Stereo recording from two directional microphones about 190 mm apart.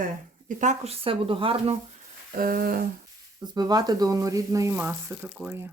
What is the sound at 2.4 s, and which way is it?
Speech, 50° right (ahead or behind).